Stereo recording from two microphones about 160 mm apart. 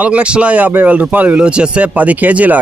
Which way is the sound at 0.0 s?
5° right (ahead or behind).